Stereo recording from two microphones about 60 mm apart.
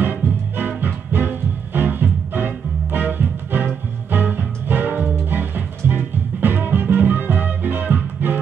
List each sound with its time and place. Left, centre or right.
0.0 s music: right